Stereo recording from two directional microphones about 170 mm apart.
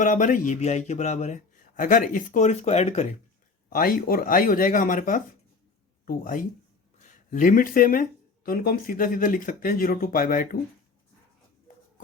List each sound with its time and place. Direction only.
0.0 s speech: 50° left (ahead or behind)
3.7 s speech: 55° left (ahead or behind)